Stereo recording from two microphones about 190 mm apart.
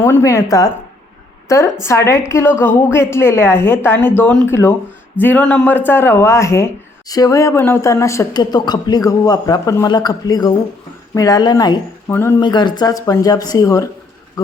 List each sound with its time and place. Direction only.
0.0 s a woman's voice: 15° left (ahead or behind)
12.4 s speech: 25° left (ahead or behind)